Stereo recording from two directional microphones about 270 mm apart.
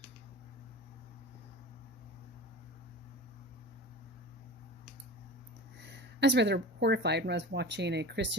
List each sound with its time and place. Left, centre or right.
5.8 s speech: right